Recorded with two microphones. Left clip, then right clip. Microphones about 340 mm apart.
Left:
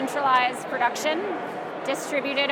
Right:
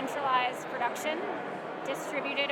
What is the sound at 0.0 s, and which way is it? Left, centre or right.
Speech, left.